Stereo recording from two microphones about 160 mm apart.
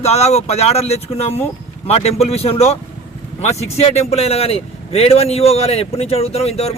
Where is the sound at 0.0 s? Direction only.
45° left (ahead or behind).